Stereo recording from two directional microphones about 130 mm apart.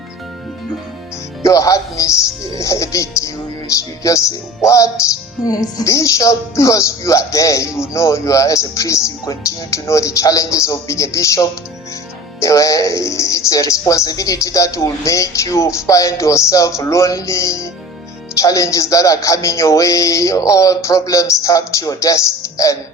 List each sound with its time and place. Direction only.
1.4 s speech: 25° left (ahead or behind)